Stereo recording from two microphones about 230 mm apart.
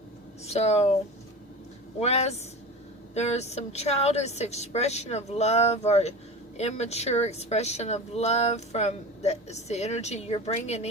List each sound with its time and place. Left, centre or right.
0.4 s speech: left
2.0 s speech: left